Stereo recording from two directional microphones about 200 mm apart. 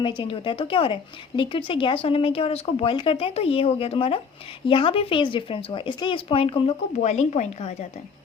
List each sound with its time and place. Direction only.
0.0 s a woman's voice: 25° left (ahead or behind)